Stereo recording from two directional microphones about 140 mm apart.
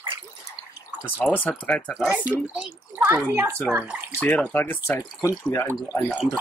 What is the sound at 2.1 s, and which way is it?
A child's voice, 10° right (ahead or behind).